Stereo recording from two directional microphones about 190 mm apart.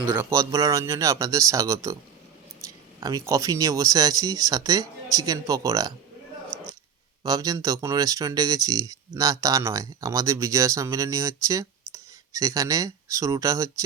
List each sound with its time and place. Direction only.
0.2 s speech: 15° right (ahead or behind)
6.5 s clicking: centre (ahead or behind)
7.3 s speech: 20° right (ahead or behind)